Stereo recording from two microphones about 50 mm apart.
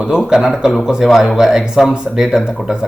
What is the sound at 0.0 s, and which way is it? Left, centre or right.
Speech, centre.